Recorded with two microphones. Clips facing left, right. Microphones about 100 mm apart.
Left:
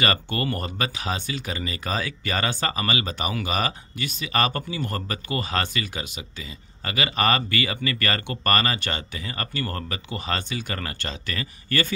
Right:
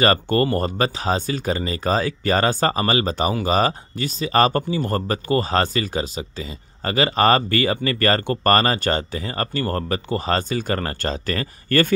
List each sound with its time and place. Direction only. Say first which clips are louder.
0.0 s speech: right 7 dB; 40° right (ahead or behind)